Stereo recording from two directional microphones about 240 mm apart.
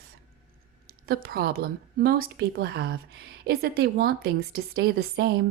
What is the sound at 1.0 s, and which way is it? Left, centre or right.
Speech, right.